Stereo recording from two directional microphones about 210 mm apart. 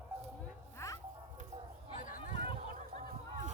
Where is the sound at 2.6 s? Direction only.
40° right (ahead or behind).